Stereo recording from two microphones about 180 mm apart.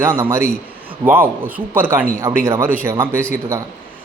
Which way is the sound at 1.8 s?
10° right (ahead or behind).